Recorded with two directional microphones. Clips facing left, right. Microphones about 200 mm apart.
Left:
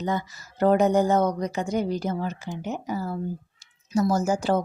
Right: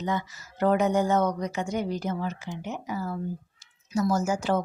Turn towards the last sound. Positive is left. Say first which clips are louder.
# left 2 dB
turn(degrees=35)  # may be behind; listen again after turning